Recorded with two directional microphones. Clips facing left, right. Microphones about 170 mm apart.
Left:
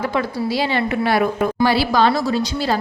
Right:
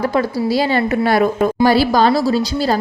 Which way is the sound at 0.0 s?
40° right (ahead or behind).